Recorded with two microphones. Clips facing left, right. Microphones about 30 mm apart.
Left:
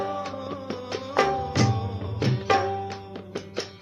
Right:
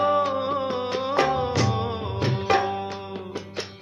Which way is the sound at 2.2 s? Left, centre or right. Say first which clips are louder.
Even; centre.